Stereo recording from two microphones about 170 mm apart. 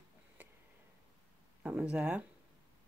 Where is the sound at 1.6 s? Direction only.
5° right (ahead or behind).